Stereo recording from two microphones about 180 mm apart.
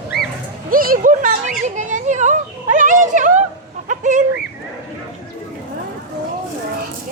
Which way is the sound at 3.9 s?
45° right (ahead or behind).